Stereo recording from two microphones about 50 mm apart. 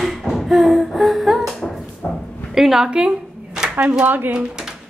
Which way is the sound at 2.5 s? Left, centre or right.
Centre.